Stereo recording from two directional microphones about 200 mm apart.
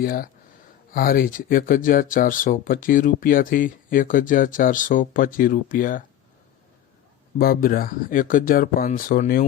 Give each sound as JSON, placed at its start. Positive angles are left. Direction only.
{"t": 0.0, "sound": "speech", "side_deg": 45}
{"t": 7.3, "sound": "speech", "side_deg": 45}